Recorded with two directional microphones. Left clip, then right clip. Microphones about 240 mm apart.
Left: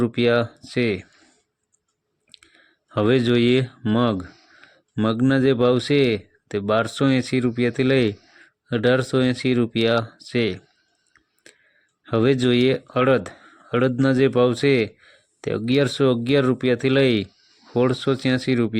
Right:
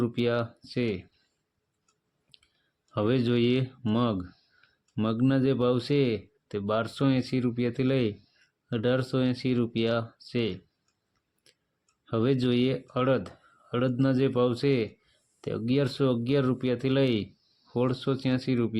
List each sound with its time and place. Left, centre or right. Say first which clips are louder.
0.0 s speech: left 8 dB; left
2.9 s speech: left 8 dB; left
12.0 s speech: left 8 dB; left